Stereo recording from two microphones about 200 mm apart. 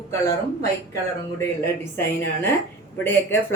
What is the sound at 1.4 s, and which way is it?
A woman's voice, 10° left (ahead or behind).